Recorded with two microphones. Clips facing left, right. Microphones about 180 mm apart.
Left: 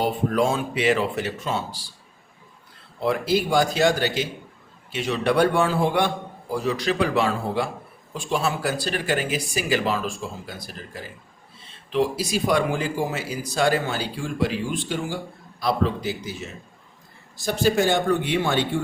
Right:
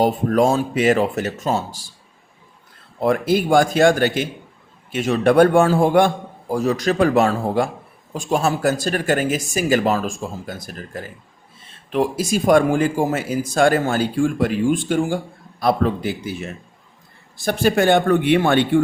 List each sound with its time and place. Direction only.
0.0 s speech: 45° right (ahead or behind)
3.0 s a man's voice: 50° right (ahead or behind)